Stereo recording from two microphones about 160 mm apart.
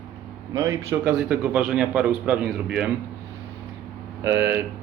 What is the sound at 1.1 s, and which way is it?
A man's voice, 5° right (ahead or behind).